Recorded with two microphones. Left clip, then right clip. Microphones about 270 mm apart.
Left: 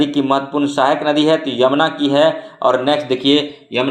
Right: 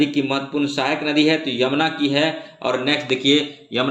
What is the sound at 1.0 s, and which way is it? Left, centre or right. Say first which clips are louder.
Speech: left 4 dB; left.